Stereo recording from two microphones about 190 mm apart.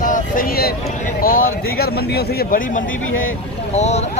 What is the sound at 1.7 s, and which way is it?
Speech, 55° left (ahead or behind).